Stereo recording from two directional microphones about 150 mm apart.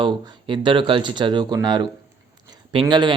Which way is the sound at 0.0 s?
35° right (ahead or behind).